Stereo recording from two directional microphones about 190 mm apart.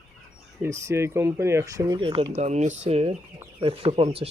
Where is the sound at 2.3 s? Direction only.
35° right (ahead or behind).